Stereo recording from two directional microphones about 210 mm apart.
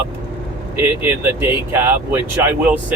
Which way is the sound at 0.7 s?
10° right (ahead or behind).